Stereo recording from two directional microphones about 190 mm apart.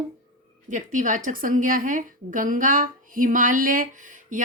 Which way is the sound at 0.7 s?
40° right (ahead or behind).